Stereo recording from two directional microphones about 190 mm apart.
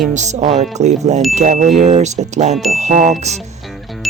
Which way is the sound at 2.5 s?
Centre (ahead or behind).